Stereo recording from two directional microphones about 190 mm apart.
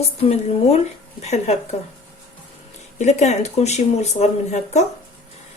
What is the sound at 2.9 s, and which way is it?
Speech, 35° left (ahead or behind).